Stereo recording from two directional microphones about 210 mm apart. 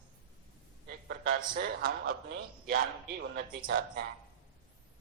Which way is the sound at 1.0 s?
45° right (ahead or behind).